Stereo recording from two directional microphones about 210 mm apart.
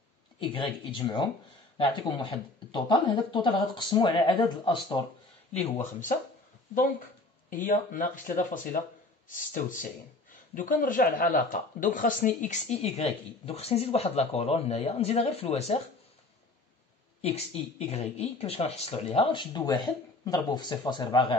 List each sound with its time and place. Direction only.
0.4 s speech: 25° left (ahead or behind)
5.5 s speech: 30° left (ahead or behind)
7.4 s speech: 40° left (ahead or behind)
17.2 s speech: 30° left (ahead or behind)